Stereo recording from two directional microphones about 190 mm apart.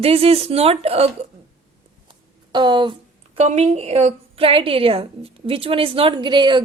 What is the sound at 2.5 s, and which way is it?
Speech, 25° right (ahead or behind).